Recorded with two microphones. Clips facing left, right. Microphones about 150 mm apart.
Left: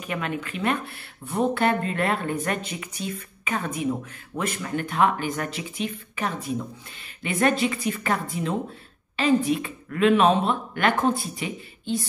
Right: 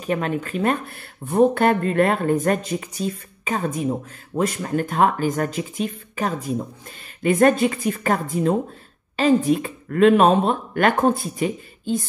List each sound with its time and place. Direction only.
0.0 s speech: 35° right (ahead or behind)